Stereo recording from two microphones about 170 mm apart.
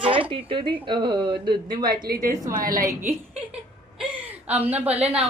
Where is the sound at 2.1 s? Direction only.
60° right (ahead or behind).